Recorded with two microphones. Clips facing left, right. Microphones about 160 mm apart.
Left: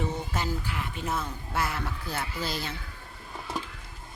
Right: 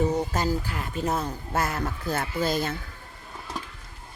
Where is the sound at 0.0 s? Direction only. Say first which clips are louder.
Right 7 dB; 40° right (ahead or behind).